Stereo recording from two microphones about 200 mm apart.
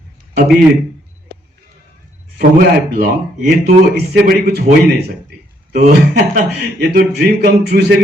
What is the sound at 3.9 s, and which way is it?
A man's voice, 55° right (ahead or behind).